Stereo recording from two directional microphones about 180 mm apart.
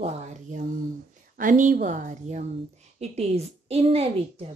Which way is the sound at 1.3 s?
50° right (ahead or behind).